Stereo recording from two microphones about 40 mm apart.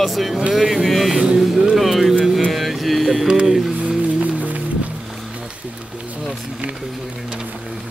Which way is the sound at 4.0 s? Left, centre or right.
Right.